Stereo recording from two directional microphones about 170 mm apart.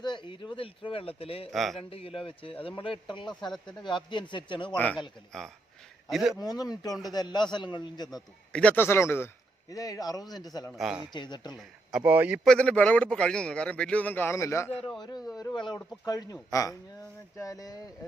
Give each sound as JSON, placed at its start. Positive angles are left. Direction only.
{"t": 0.0, "sound": "speech", "side_deg": 25}
{"t": 1.5, "sound": "speech", "side_deg": 0}
{"t": 1.9, "sound": "a man's voice", "side_deg": 35}
{"t": 4.7, "sound": "a man's voice", "side_deg": 10}
{"t": 6.4, "sound": "a man's voice", "side_deg": 20}
{"t": 8.5, "sound": "a man's voice", "side_deg": 10}
{"t": 10.7, "sound": "speech", "side_deg": -5}
{"t": 11.1, "sound": "a man's voice", "side_deg": 25}
{"t": 11.5, "sound": "speech", "side_deg": 0}
{"t": 12.5, "sound": "a man's voice", "side_deg": 5}